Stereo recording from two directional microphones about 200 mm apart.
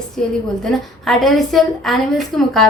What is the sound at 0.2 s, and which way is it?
A woman's voice, 5° left (ahead or behind).